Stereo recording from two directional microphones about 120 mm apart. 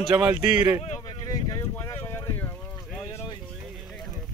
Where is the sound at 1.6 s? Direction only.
20° left (ahead or behind).